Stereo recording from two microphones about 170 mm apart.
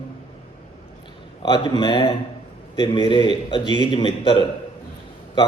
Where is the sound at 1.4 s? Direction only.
25° left (ahead or behind).